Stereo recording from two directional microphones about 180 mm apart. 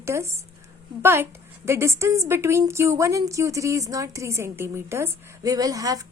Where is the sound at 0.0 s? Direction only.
15° right (ahead or behind).